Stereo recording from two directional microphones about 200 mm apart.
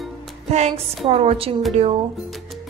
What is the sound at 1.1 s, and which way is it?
Speech, 30° right (ahead or behind).